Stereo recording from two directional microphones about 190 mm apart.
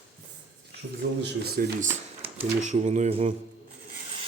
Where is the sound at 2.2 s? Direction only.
35° right (ahead or behind).